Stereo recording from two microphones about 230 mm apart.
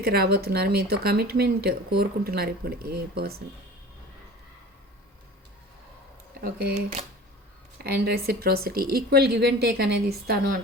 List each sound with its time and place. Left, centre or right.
0.0 s speech: right
6.4 s speech: right
7.8 s speech: right